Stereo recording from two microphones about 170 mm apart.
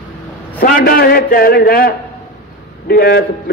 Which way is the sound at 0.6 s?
55° left (ahead or behind).